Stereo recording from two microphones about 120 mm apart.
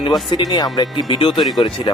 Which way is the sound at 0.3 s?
40° left (ahead or behind).